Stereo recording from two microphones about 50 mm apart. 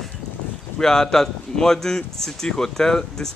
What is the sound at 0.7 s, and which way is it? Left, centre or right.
A man's voice, centre.